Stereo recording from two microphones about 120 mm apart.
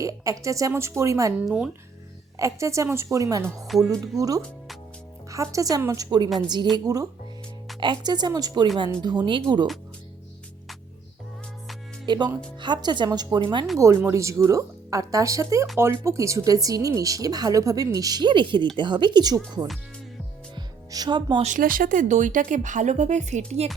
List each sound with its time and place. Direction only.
0.0 s speech: 25° right (ahead or behind)
1.5 s speech: 5° right (ahead or behind)
2.4 s speech: 25° right (ahead or behind)
3.7 s speech: centre (ahead or behind)
4.2 s speech: 30° right (ahead or behind)
12.0 s speech: 40° right (ahead or behind)
13.7 s speech: 25° right (ahead or behind)
20.6 s music: 35° right (ahead or behind)
21.4 s speech: 90° right
23.6 s speech: 60° right (ahead or behind)